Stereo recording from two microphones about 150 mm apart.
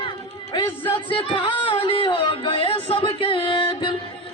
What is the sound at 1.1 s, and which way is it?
Music, 35° left (ahead or behind).